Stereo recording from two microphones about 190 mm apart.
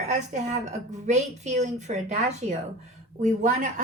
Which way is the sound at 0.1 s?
40° right (ahead or behind).